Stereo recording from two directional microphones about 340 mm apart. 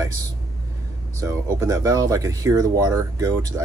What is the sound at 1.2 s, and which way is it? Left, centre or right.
Speech, centre.